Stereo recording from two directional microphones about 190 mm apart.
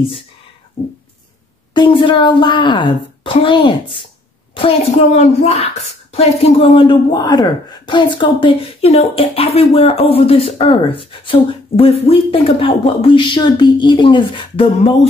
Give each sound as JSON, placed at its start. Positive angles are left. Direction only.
{"t": 1.7, "sound": "a woman's voice", "side_deg": 25}